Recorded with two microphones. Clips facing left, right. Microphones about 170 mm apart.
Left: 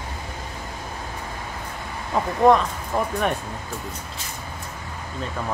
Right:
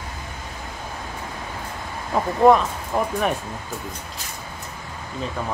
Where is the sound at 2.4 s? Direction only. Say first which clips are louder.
Right 1 dB; 5° right (ahead or behind).